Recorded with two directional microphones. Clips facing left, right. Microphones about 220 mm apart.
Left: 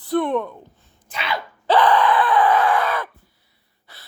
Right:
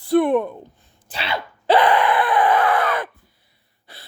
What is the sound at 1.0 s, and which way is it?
Sneeze, 30° right (ahead or behind).